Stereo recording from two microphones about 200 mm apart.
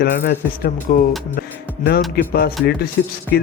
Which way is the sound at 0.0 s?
50° left (ahead or behind).